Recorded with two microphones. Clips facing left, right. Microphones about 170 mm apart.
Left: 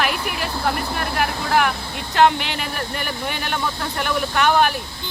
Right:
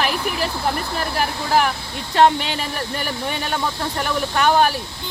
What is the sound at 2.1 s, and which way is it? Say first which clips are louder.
Speech: right 1 dB; 30° right (ahead or behind).